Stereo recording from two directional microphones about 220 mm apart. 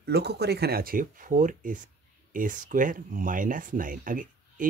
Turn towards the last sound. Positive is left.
turn(degrees=-40)  # may be behind; listen again after turning